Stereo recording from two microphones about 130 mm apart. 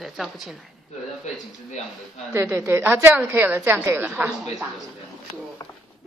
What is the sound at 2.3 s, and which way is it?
Speech, 20° right (ahead or behind).